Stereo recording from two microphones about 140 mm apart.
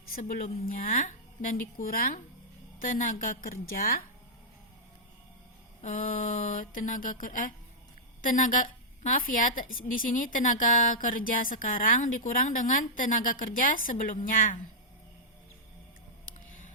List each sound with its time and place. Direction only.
0.1 s a woman's voice: 80° left
2.8 s a woman's voice: 75° left (ahead or behind); by 4.0 s 90° left
5.8 s a woman's voice: 75° left (ahead or behind)
16.2 s a sound: 65° left (ahead or behind)